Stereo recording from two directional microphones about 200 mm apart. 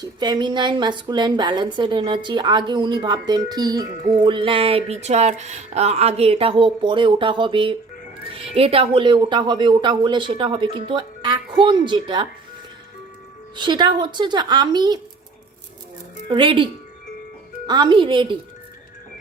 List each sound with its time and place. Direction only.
0.0 s a woman's voice: 20° right (ahead or behind)
13.6 s a woman's voice: 20° right (ahead or behind)
16.3 s a woman's voice: 25° right (ahead or behind)
17.7 s a woman's voice: 20° right (ahead or behind)